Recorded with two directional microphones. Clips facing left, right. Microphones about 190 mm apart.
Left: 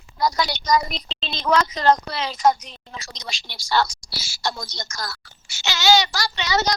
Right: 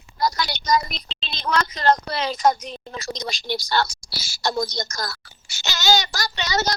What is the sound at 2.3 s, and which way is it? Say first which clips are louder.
A woman's voice: left 1 dB; 40° right (ahead or behind).